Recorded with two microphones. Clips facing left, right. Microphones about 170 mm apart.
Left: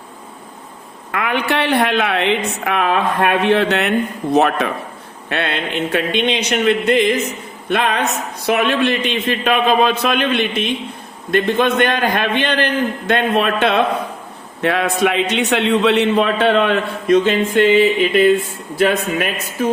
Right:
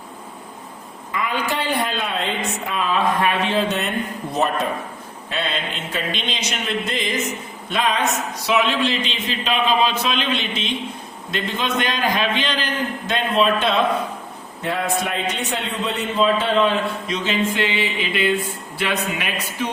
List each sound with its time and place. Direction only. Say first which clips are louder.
1.1 s a woman's voice: left 5 dB; 70° left (ahead or behind)
14.6 s a woman's voice: left 7 dB; 80° left; by 19.7 s 45° left (ahead or behind)